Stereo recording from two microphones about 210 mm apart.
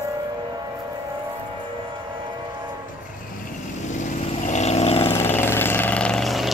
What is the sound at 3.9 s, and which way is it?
Vehicle, 35° left (ahead or behind).